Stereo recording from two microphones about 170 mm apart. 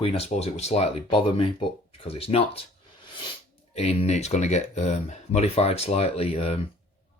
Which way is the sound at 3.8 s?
40° left (ahead or behind).